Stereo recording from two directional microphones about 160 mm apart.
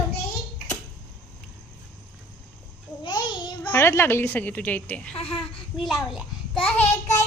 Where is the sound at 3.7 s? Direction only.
15° left (ahead or behind).